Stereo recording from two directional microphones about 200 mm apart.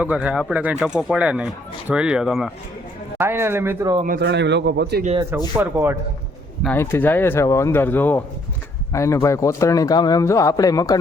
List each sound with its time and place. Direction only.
0.0 s speech: 5° right (ahead or behind)
3.2 s speech: 10° right (ahead or behind)
4.2 s a man's voice: 60° right (ahead or behind)
5.5 s speech: 15° right (ahead or behind)
6.7 s a man's voice: 10° left (ahead or behind)